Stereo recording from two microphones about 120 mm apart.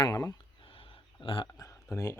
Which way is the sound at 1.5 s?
25° left (ahead or behind).